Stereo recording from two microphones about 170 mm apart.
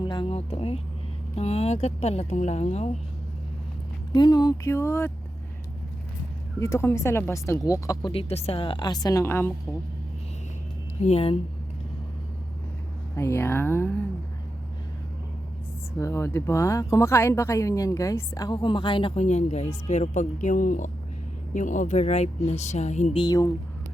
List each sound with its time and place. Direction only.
0.0 s speech: 30° left (ahead or behind)
4.1 s speech: 25° left (ahead or behind)
6.6 s speech: 15° left (ahead or behind)
8.1 s speech: 35° left (ahead or behind); by 9.5 s 15° left (ahead or behind)
11.0 s speech: 35° left (ahead or behind)
13.1 s speech: 15° left (ahead or behind)
16.0 s speech: 15° left (ahead or behind); by 23.0 s 45° left (ahead or behind)
23.1 s speech: 25° left (ahead or behind)